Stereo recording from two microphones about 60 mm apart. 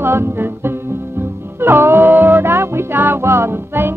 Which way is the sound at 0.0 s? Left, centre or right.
Right.